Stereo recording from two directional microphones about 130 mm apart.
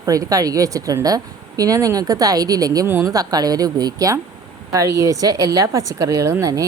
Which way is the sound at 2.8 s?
15° right (ahead or behind).